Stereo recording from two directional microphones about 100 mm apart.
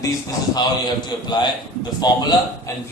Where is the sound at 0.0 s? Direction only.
40° left (ahead or behind).